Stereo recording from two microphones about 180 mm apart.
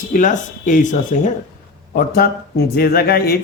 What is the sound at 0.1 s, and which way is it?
Speech, 45° left (ahead or behind).